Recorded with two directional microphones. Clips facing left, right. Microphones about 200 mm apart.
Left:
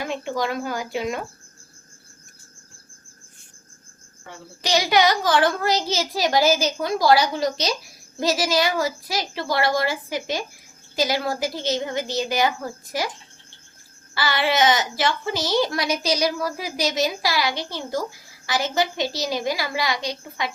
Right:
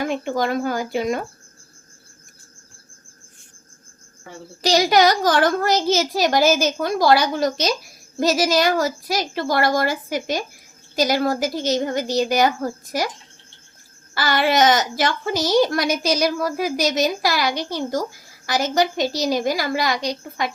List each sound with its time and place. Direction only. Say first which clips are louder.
0.1 s a woman's voice: right 4 dB; 50° right (ahead or behind)
4.6 s a woman's voice: right 3 dB; 40° right (ahead or behind)
14.2 s a woman's voice: right 3 dB; 45° right (ahead or behind)